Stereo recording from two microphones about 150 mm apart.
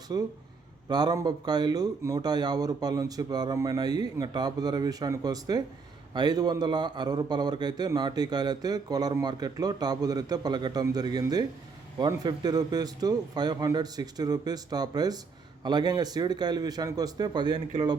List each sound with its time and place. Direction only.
0.1 s a man's voice: 25° right (ahead or behind)